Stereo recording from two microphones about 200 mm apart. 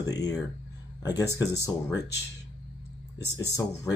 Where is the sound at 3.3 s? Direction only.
15° left (ahead or behind).